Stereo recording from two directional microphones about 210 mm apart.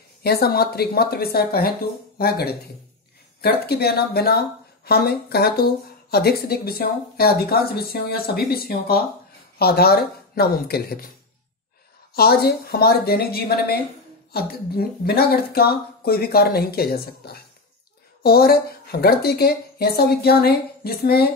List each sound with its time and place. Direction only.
0.2 s speech: 50° left (ahead or behind)
12.1 s speech: 50° left (ahead or behind)